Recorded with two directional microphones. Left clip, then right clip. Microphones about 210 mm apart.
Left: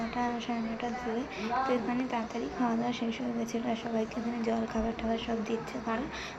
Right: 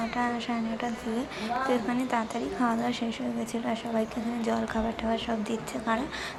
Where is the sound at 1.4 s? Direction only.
15° right (ahead or behind).